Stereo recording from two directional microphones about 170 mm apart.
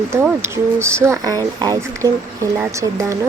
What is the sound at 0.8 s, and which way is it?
A woman's voice, 15° right (ahead or behind).